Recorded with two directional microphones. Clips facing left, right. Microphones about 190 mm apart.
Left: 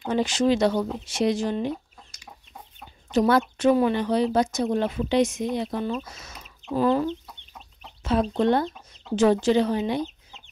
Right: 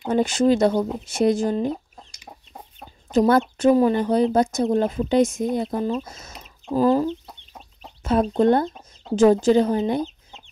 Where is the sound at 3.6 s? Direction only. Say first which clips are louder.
Right 3 dB; 40° right (ahead or behind).